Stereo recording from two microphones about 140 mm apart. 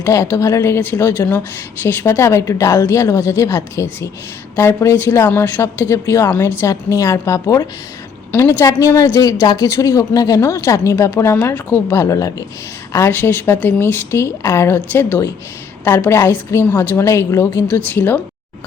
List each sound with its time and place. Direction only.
0.0 s a woman's voice: 20° left (ahead or behind)